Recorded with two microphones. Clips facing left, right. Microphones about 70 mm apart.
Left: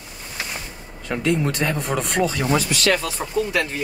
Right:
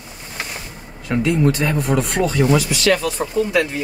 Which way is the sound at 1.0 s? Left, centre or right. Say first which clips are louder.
Right 4 dB; centre.